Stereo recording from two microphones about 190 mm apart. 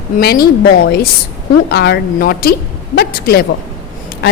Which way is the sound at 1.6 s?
60° left (ahead or behind).